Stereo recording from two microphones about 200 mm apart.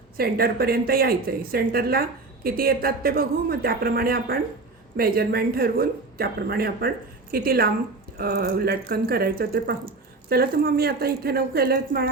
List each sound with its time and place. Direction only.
0.2 s speech: 50° right (ahead or behind)